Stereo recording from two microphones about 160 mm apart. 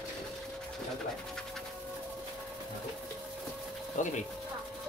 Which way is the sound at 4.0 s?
50° left (ahead or behind).